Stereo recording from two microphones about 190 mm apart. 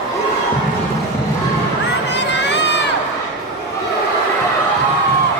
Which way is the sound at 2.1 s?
65° left (ahead or behind).